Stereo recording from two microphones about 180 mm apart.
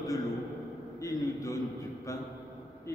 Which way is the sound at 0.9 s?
15° left (ahead or behind).